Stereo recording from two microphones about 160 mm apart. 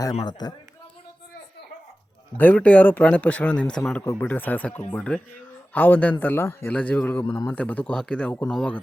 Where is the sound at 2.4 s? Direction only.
10° left (ahead or behind).